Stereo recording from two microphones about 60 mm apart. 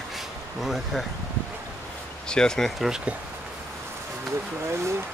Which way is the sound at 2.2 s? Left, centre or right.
Centre.